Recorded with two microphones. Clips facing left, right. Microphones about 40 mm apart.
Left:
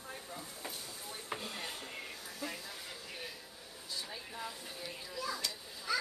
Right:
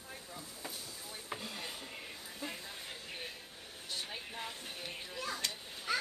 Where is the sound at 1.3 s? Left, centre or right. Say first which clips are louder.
Left 1 dB; centre.